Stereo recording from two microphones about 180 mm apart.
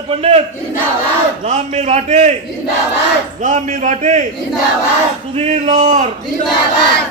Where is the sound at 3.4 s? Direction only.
45° right (ahead or behind).